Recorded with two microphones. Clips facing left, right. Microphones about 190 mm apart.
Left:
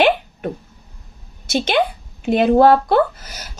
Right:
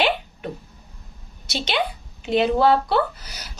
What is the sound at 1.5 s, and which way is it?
A woman's voice, 50° left (ahead or behind).